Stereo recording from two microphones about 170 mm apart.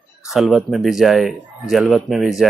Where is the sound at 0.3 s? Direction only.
Centre (ahead or behind).